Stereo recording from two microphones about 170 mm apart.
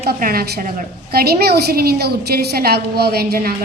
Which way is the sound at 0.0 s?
60° right (ahead or behind).